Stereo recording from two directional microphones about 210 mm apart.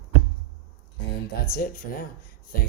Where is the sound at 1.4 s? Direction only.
40° left (ahead or behind).